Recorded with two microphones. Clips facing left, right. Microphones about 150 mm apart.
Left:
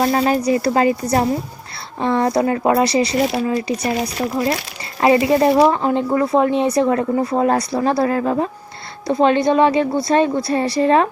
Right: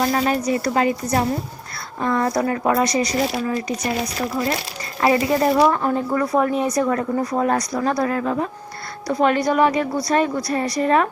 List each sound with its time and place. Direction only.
0.0 s a woman's voice: 30° left (ahead or behind)